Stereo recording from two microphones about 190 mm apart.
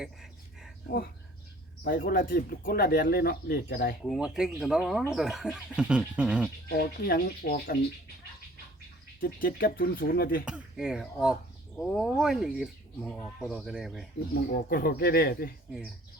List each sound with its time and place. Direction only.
0.0 s a sound: centre (ahead or behind)
1.8 s speech: 50° left (ahead or behind)
4.0 s speech: centre (ahead or behind)
6.7 s speech: 55° left (ahead or behind)
9.2 s speech: 50° left (ahead or behind)
10.4 s speech: 5° right (ahead or behind)
14.7 s speech: 50° left (ahead or behind)